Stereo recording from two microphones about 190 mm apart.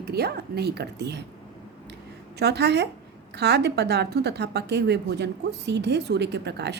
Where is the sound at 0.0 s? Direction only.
55° right (ahead or behind).